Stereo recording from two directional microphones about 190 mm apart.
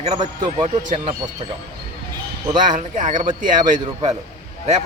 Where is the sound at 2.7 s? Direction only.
40° right (ahead or behind).